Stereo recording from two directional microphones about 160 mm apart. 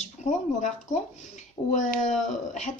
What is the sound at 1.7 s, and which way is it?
Speech, 50° left (ahead or behind).